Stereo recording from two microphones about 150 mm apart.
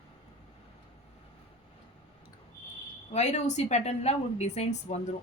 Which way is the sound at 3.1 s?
50° left (ahead or behind).